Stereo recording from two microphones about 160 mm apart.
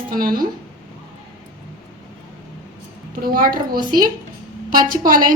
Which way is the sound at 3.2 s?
65° right (ahead or behind).